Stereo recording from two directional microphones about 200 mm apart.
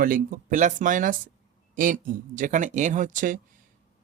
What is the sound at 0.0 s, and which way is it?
Speech, 45° right (ahead or behind).